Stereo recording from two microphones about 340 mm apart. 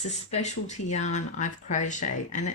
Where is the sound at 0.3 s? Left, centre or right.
Centre.